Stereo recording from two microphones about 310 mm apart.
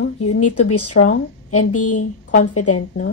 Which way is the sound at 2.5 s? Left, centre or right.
Left.